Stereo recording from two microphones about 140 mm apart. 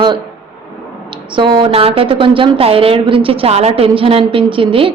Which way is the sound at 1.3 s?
35° right (ahead or behind).